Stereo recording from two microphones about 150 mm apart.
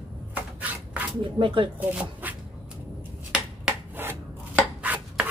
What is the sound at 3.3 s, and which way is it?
Chopping, 10° right (ahead or behind).